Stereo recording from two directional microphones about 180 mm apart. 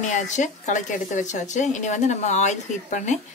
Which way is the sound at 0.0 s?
40° left (ahead or behind).